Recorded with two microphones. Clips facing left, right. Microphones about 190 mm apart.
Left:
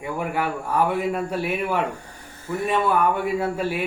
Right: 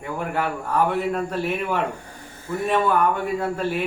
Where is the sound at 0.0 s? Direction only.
10° left (ahead or behind).